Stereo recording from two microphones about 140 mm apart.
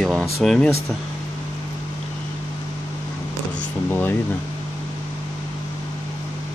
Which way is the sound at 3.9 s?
15° left (ahead or behind).